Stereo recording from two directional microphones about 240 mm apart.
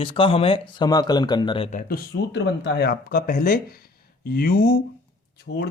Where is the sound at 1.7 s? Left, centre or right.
Left.